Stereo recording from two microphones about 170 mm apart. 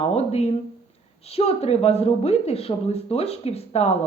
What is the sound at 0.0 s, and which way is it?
Speech, 35° left (ahead or behind).